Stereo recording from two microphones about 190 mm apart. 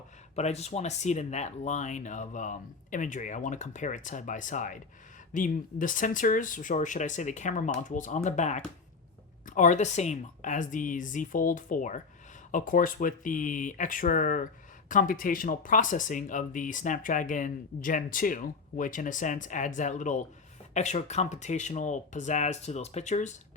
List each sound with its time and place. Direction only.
0.3 s speech: 35° left (ahead or behind)